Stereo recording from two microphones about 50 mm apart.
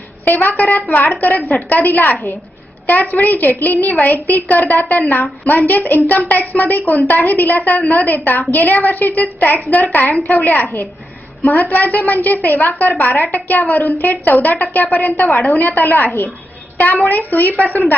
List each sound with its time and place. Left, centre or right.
0.3 s a woman's voice: left